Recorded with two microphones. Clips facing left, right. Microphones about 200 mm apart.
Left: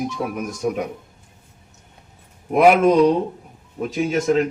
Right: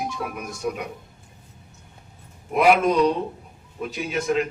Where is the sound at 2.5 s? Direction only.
50° left (ahead or behind).